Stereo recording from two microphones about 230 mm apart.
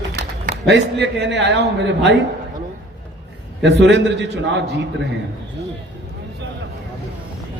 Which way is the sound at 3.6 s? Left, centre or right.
Right.